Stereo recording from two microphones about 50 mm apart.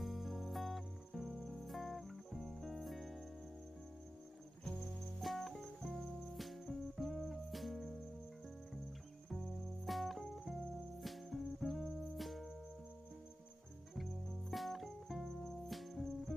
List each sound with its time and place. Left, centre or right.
0.0 s music: centre
5.2 s music: centre
9.3 s music: centre
13.9 s music: centre